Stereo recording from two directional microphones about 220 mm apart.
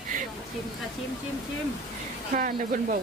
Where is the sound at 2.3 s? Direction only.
40° right (ahead or behind).